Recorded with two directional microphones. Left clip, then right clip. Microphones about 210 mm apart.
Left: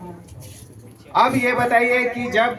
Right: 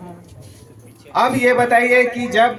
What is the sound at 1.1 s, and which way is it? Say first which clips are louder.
A man's voice: right 2 dB; 50° right (ahead or behind).